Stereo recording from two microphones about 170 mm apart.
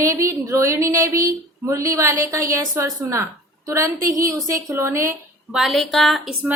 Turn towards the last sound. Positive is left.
turn(degrees=0)  # may be behind; listen again after turning